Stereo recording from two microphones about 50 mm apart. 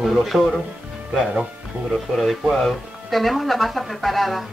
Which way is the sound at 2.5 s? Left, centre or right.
Centre.